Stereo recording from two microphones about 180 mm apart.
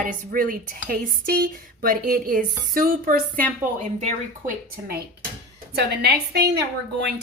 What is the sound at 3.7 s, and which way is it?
Speech, 40° right (ahead or behind).